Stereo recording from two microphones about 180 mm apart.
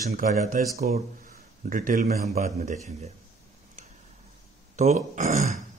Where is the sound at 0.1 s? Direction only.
50° right (ahead or behind).